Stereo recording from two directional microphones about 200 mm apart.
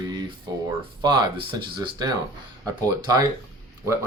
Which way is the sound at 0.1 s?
20° right (ahead or behind).